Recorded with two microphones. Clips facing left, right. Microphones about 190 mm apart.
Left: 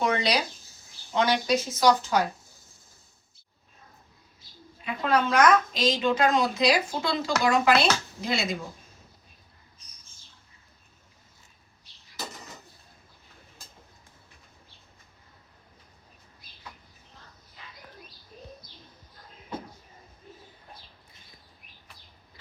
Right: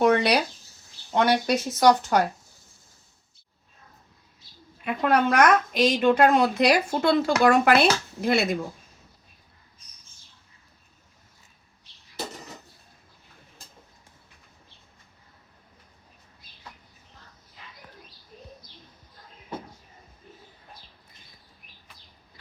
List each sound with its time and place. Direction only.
0.0 s a sound: 55° right (ahead or behind)
1.1 s a woman's voice: 60° right (ahead or behind)
4.9 s a woman's voice: 55° right (ahead or behind)